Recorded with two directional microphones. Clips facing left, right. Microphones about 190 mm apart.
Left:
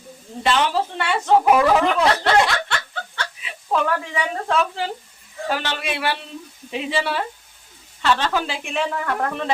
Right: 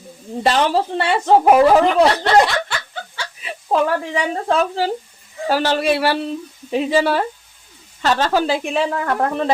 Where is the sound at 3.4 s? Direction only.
40° right (ahead or behind).